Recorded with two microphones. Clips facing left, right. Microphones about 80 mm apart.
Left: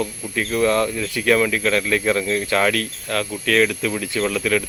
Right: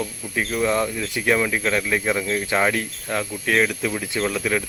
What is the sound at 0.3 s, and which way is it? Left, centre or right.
Speech, centre.